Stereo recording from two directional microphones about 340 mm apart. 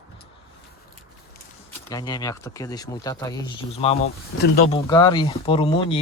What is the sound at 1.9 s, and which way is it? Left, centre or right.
Speech, centre.